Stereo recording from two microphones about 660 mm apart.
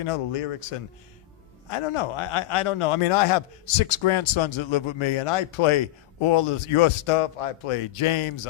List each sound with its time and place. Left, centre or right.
0.0 s a man's voice: left